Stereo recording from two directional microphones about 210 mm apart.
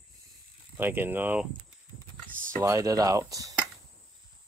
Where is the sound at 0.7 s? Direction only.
10° right (ahead or behind).